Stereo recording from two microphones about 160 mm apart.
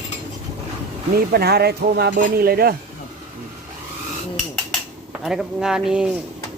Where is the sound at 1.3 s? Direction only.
85° right.